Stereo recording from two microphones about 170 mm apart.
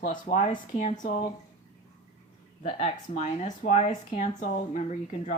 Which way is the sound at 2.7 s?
40° left (ahead or behind).